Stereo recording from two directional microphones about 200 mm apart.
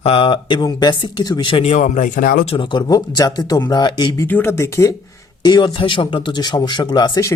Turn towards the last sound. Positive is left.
turn(degrees=20)  # may be behind; listen again after turning